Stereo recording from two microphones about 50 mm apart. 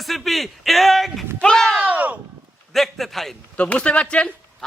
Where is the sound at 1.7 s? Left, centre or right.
Right.